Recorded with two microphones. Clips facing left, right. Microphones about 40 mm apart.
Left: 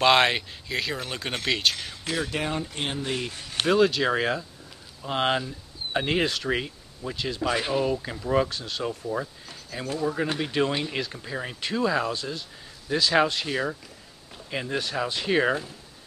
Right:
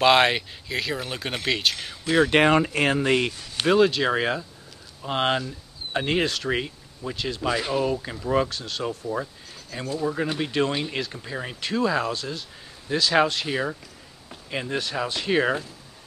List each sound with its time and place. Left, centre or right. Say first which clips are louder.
0.0 s speech: right 2 dB; centre
2.2 s speech: right 11 dB; right
3.6 s speech: right 2 dB; centre
14.3 s a sound: right 1 dB; centre
14.8 s speech: right 1 dB; centre